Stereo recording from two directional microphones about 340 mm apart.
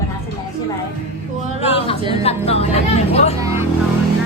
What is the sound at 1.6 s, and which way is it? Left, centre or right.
A woman's voice, centre.